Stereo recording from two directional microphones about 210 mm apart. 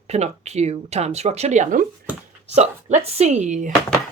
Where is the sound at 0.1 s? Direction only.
30° right (ahead or behind).